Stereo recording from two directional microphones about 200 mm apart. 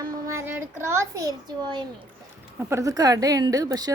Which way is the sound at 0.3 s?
15° right (ahead or behind).